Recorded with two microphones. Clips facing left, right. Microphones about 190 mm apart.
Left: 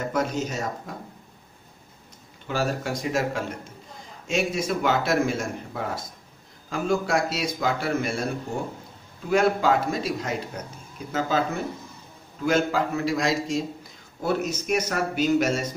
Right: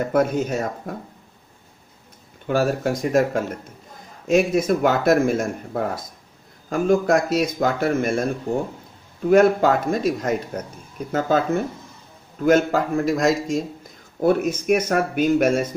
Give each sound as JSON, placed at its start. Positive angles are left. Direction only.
{"t": 0.1, "sound": "speech", "side_deg": -55}
{"t": 2.4, "sound": "speech", "side_deg": -50}
{"t": 9.3, "sound": "speech", "side_deg": -50}